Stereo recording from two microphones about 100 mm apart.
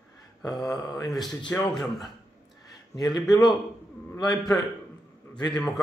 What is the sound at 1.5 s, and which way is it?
Speech, 25° left (ahead or behind).